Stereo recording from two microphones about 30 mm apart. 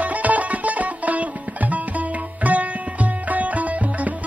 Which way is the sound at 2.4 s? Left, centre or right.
Right.